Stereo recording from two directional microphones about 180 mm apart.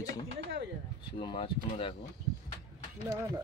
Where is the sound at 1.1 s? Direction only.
30° left (ahead or behind).